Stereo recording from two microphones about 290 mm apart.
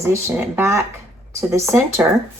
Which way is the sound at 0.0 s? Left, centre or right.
Centre.